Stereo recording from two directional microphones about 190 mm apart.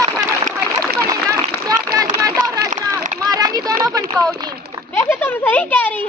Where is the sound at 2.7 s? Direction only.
40° right (ahead or behind).